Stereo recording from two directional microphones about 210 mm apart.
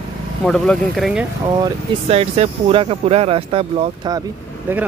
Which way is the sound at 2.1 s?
30° right (ahead or behind).